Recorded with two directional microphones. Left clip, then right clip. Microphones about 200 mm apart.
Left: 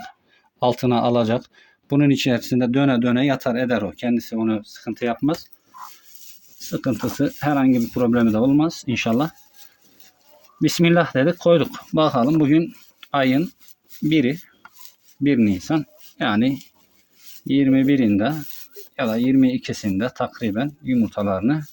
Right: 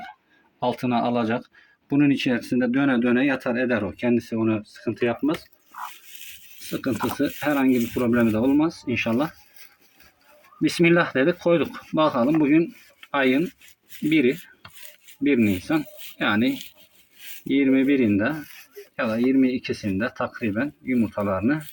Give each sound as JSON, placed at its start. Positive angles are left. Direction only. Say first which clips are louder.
{"t": 0.6, "sound": "speech", "louder": "left 5 dB", "side_deg": 50}
{"t": 6.7, "sound": "speech", "louder": "left 1 dB", "side_deg": 45}
{"t": 10.6, "sound": "speech", "louder": "left 1 dB", "side_deg": 45}
{"t": 17.5, "sound": "speech", "louder": "left 2 dB", "side_deg": 45}